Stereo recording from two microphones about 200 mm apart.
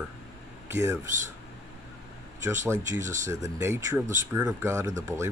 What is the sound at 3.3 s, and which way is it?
Speech, 15° right (ahead or behind).